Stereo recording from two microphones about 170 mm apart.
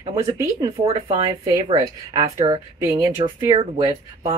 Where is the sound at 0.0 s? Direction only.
25° right (ahead or behind).